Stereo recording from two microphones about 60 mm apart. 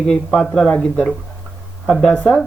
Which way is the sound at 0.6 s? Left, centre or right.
Left.